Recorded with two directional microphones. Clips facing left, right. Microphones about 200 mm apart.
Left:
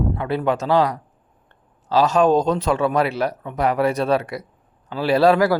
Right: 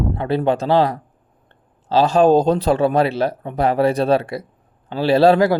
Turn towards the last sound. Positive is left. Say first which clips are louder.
# right 2 dB
turn(degrees=-25)  # may be behind; listen again after turning